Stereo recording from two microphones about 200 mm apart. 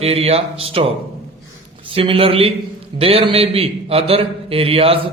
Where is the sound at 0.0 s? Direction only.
30° right (ahead or behind).